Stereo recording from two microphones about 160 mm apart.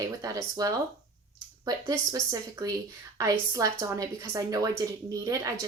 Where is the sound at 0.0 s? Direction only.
20° right (ahead or behind).